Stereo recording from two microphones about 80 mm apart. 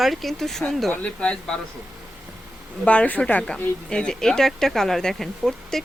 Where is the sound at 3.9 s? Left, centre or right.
Centre.